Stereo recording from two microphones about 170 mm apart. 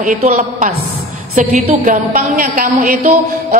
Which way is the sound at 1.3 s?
50° right (ahead or behind).